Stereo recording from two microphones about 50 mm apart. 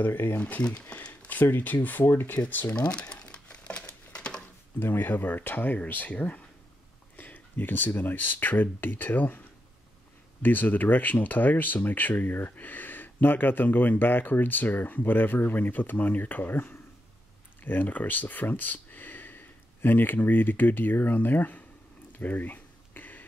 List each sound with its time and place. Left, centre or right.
0.0 s speech: left
0.6 s speech: left
1.0 s a sound: left
1.4 s speech: left
2.7 s crumpling: left
4.7 s speech: left
22.2 s a sound: left